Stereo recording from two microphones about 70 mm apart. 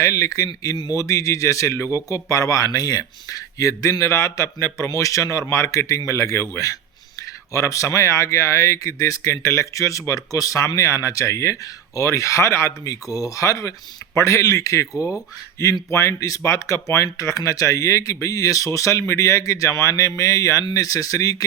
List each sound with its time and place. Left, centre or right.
0.0 s speech: left
15.9 s speech: left